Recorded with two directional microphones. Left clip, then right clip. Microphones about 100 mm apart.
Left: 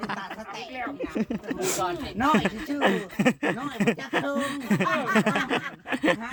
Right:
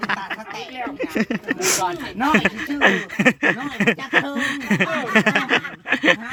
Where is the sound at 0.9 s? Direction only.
20° right (ahead or behind).